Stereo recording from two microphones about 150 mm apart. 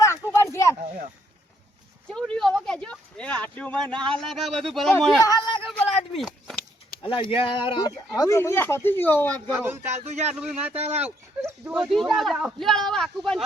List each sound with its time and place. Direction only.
0.0 s a sound: 20° left (ahead or behind)
2.0 s speech: 5° left (ahead or behind)
5.2 s speech: 25° left (ahead or behind)
5.6 s speech: centre (ahead or behind)
7.0 s speech: 35° left (ahead or behind); by 9.4 s 10° left (ahead or behind)
9.5 s speech: 15° right (ahead or behind)
9.8 s speech: 50° right (ahead or behind)
10.3 s speech: 5° right (ahead or behind)
10.8 s speech: 45° right (ahead or behind)
11.0 s speech: 10° right (ahead or behind)